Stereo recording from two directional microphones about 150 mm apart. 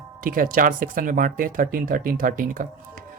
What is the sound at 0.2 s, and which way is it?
Speech, 70° right (ahead or behind).